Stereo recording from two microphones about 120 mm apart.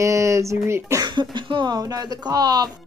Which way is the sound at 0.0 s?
25° right (ahead or behind).